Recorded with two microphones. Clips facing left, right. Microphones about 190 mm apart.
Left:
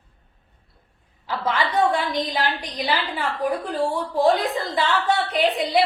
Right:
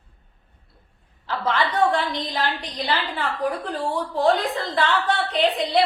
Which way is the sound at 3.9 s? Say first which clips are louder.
Even; 10° left (ahead or behind).